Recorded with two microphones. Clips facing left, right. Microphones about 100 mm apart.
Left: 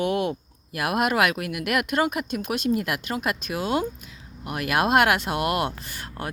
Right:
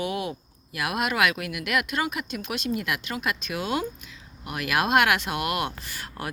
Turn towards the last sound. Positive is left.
turn(degrees=30)  # may be behind; listen again after turning